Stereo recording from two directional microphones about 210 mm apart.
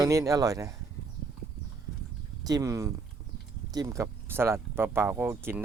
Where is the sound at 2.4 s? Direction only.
15° right (ahead or behind).